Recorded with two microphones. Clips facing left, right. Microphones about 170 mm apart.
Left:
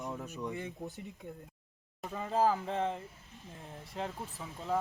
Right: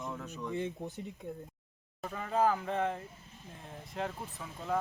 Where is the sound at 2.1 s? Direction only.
20° left (ahead or behind).